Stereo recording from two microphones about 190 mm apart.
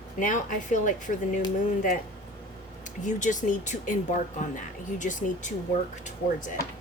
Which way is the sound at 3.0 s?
40° left (ahead or behind).